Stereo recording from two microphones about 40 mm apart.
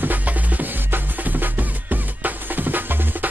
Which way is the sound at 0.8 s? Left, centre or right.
Right.